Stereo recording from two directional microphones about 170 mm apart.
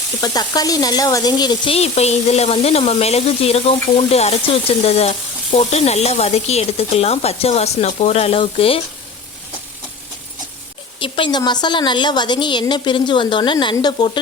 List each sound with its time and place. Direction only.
0.2 s speech: 20° left (ahead or behind)
11.0 s a woman's voice: 25° left (ahead or behind)